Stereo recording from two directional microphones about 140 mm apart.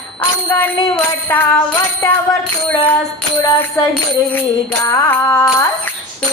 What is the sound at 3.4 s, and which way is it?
Speech, 20° left (ahead or behind).